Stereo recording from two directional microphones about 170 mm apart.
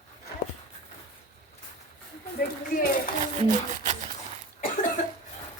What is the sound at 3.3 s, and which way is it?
Speech, 45° right (ahead or behind).